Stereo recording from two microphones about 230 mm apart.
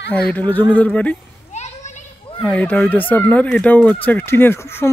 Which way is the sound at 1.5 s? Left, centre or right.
Left.